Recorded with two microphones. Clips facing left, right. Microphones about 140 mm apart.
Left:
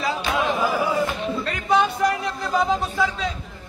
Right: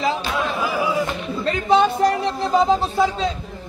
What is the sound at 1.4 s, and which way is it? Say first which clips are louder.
Music: right 5 dB; 30° right (ahead or behind).